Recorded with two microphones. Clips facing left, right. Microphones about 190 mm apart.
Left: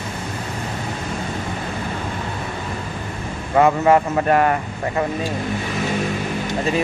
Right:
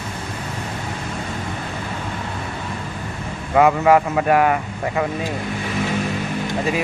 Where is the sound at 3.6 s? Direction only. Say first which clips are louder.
Even; 5° right (ahead or behind).